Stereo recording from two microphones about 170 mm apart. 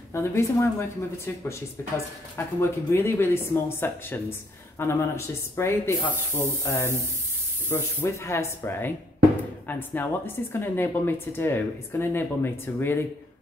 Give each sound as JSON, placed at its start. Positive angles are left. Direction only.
{"t": 0.1, "sound": "speech", "side_deg": 15}